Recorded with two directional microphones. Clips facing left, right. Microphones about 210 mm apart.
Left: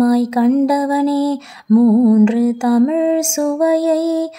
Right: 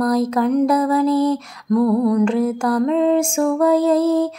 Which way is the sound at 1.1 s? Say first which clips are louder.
Left 1 dB; 35° left (ahead or behind).